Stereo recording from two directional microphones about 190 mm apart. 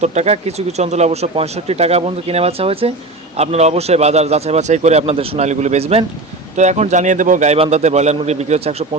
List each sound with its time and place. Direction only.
0.0 s speech: 35° right (ahead or behind)